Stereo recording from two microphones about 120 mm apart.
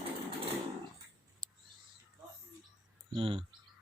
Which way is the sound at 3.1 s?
50° right (ahead or behind).